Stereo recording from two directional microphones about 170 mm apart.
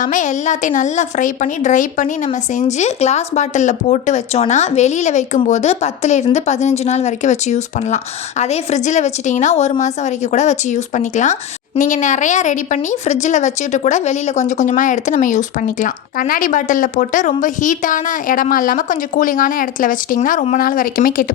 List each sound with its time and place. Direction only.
0.0 s speech: 50° left (ahead or behind)